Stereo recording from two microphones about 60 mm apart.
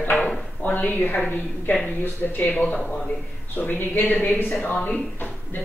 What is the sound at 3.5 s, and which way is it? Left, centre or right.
A man's voice, left.